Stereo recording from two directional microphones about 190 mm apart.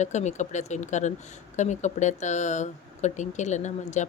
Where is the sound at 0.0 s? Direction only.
40° left (ahead or behind).